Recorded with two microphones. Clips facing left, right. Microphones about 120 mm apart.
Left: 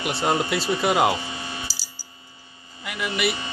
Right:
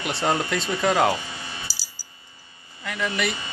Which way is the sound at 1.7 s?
35° right (ahead or behind).